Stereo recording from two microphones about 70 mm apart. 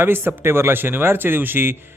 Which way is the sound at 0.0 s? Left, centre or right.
Right.